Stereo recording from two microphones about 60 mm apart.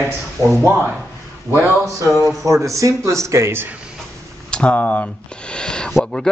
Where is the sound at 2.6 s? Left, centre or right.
Right.